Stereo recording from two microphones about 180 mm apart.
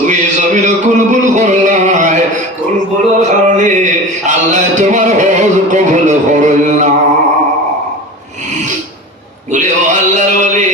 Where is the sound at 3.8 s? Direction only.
45° right (ahead or behind).